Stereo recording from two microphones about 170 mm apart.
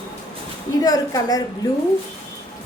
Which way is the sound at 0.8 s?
20° left (ahead or behind).